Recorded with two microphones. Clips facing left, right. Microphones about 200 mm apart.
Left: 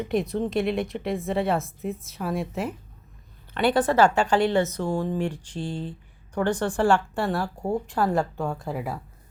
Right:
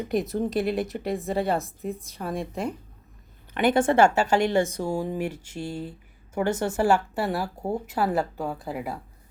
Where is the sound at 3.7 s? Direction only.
25° right (ahead or behind).